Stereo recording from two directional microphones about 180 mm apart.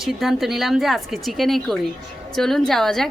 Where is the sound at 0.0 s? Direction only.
Centre (ahead or behind).